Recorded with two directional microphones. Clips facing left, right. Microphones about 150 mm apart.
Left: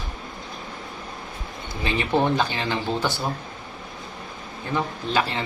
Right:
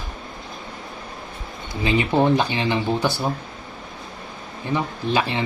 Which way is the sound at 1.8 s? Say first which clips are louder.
Right 3 dB; 15° right (ahead or behind).